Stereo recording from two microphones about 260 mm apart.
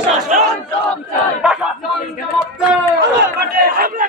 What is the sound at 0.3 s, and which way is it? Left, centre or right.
Battle cry, right.